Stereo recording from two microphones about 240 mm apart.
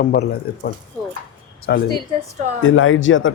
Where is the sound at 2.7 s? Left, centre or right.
Left.